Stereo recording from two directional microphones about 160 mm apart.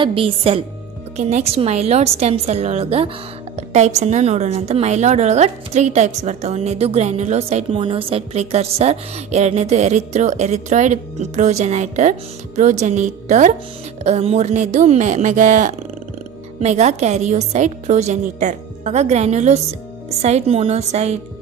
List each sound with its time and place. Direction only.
0.0 s a woman's voice: 35° right (ahead or behind)